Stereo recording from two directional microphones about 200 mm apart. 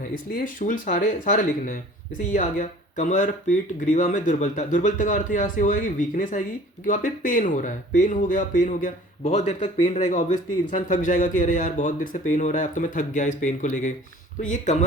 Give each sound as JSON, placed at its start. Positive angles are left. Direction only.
{"t": 0.3, "sound": "speech", "side_deg": 40}